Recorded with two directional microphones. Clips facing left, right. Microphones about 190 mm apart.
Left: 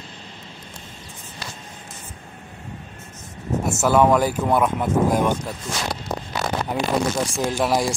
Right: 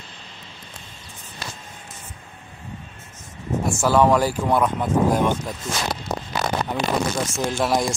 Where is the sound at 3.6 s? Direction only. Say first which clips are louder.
Even; 20° left (ahead or behind).